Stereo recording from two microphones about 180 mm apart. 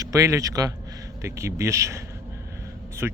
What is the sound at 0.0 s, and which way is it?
Speech, 20° right (ahead or behind).